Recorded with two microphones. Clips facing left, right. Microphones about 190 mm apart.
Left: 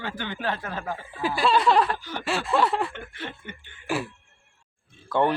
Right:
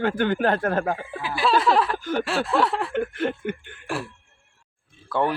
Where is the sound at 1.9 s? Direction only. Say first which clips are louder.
Right 9 dB; 50° right (ahead or behind).